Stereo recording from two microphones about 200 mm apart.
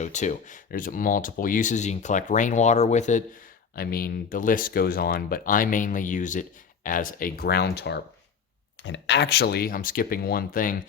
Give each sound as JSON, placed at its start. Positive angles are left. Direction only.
{"t": 0.0, "sound": "speech", "side_deg": 35}
{"t": 3.8, "sound": "speech", "side_deg": 50}